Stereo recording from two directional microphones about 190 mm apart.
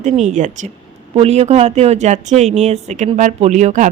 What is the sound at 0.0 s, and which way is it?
Speech, 40° right (ahead or behind).